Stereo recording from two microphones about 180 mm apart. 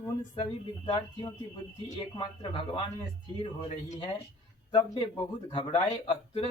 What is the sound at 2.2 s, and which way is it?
Speech, 30° left (ahead or behind).